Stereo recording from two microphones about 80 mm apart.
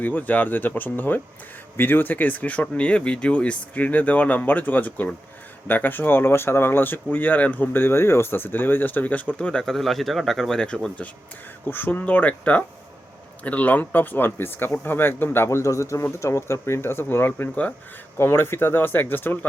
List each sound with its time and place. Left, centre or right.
0.0 s speech: left
15.4 s speech: left
18.2 s speech: left